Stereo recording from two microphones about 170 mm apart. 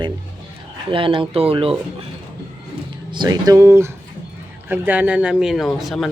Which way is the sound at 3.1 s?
25° right (ahead or behind).